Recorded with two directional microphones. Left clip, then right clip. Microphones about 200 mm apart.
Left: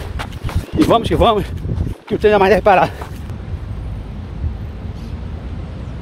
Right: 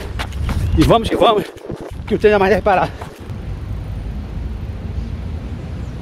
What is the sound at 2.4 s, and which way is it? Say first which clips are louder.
Speech: left 3 dB; 50° left (ahead or behind).